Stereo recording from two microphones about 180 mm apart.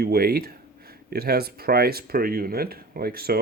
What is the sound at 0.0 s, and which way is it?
Speech, 60° right (ahead or behind).